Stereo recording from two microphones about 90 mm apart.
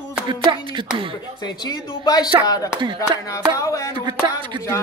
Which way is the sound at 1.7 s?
50° left (ahead or behind).